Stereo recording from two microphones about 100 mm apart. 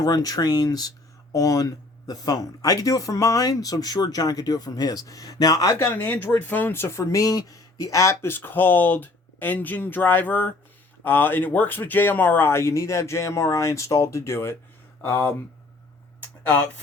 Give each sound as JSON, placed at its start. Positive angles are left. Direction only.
{"t": 0.0, "sound": "speech", "side_deg": 40}
{"t": 5.9, "sound": "speech", "side_deg": 20}